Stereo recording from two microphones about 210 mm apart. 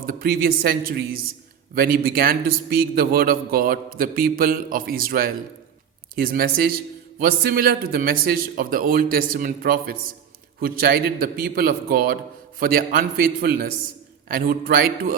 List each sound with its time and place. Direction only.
0.0 s a man's voice: 45° right (ahead or behind)